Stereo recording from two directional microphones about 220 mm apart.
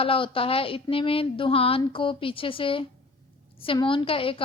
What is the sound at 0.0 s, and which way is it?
A woman's voice, 25° left (ahead or behind).